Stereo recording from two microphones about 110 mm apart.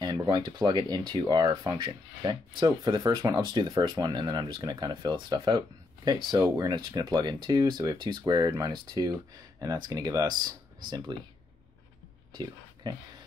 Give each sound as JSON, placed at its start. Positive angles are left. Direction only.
{"t": 0.0, "sound": "speech", "side_deg": -40}
{"t": 11.1, "sound": "speech", "side_deg": -45}
{"t": 12.9, "sound": "speech", "side_deg": -45}